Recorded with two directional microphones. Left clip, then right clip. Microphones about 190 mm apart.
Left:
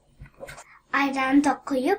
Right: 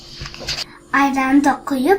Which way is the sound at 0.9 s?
15° left (ahead or behind).